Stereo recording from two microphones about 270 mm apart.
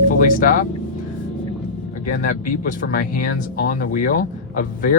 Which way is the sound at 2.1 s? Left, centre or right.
Left.